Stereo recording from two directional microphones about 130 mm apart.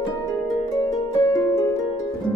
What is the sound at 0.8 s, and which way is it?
Harp, 25° left (ahead or behind).